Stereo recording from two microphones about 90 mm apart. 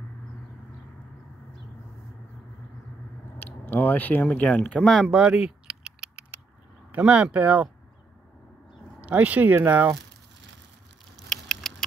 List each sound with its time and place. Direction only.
3.3 s speech: 20° left (ahead or behind)
5.1 s a sound: 5° right (ahead or behind)
6.9 s speech: 15° right (ahead or behind)
9.0 s speech: 15° right (ahead or behind)
11.2 s vehicle: 5° left (ahead or behind)